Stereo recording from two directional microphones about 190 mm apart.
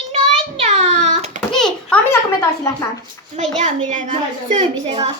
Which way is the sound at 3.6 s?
40° right (ahead or behind).